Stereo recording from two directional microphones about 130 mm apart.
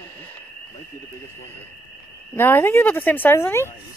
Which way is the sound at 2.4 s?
15° left (ahead or behind).